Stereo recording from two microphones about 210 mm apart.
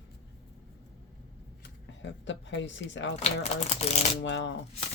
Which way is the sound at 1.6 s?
60° left (ahead or behind).